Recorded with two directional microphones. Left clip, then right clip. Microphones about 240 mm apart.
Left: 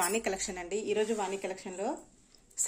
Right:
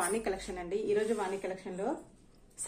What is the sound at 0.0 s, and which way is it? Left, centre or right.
A woman's voice, left.